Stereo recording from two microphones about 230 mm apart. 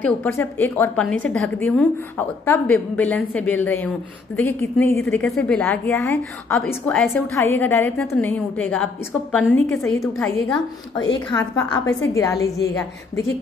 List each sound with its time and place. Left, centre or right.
0.0 s a woman's voice: centre
11.3 s a woman's voice: centre